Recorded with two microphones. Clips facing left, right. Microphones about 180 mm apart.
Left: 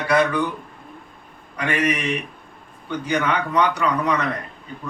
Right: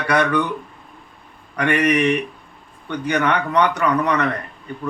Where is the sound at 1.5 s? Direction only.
60° right (ahead or behind).